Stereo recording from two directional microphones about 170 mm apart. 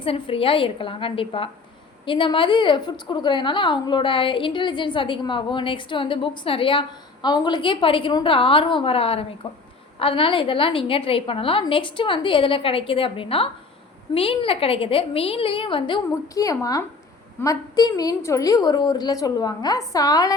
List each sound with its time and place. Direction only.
0.0 s a woman's voice: 30° left (ahead or behind)